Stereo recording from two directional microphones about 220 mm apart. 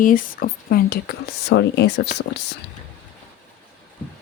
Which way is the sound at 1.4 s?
50° left (ahead or behind).